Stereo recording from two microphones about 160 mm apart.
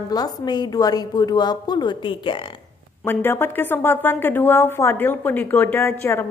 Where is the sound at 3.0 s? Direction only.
15° left (ahead or behind).